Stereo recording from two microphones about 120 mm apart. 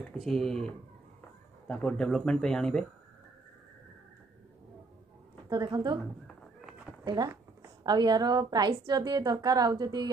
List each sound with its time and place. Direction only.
0.2 s speech: 5° left (ahead or behind)
5.5 s a woman's voice: 35° right (ahead or behind)
7.8 s a woman's voice: 35° right (ahead or behind)